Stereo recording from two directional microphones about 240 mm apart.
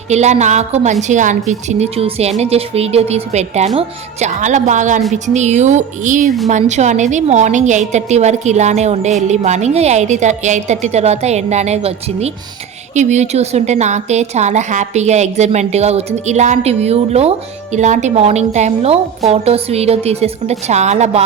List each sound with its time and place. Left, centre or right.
0.1 s a woman's voice: right